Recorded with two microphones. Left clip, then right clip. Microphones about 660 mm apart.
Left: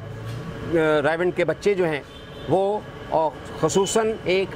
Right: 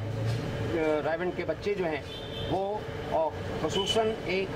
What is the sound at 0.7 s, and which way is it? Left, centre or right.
Speech, left.